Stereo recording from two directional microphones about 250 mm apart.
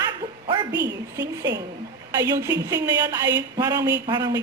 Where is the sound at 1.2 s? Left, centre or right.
Centre.